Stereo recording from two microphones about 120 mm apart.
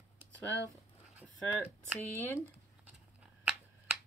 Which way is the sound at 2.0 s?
20° left (ahead or behind).